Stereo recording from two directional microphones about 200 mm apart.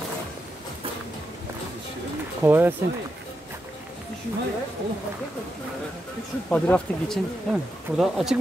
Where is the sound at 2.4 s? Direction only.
10° right (ahead or behind).